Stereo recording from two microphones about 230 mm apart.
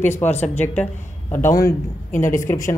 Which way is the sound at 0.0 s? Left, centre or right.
Centre.